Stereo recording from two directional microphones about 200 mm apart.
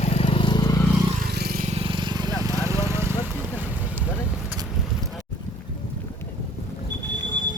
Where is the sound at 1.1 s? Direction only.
50° right (ahead or behind).